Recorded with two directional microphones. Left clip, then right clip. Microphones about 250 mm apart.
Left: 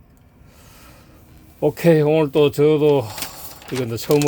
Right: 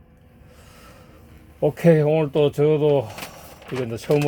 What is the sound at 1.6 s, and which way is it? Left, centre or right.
Speech, centre.